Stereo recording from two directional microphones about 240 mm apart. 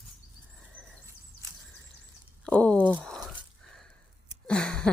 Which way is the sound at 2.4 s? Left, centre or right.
Centre.